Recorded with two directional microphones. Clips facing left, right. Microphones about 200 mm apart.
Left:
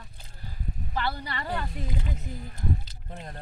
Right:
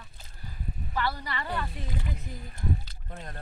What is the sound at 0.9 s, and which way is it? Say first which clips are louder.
Speech: even; 35° left (ahead or behind).